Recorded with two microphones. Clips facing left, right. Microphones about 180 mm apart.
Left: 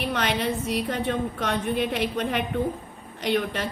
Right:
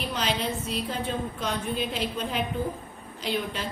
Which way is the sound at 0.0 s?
65° left (ahead or behind).